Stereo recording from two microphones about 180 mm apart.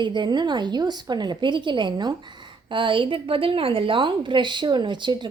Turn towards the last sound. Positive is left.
turn(degrees=-25)  # may be behind; listen again after turning